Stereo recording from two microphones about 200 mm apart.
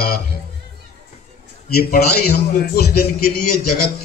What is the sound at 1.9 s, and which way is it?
Speech, 45° left (ahead or behind).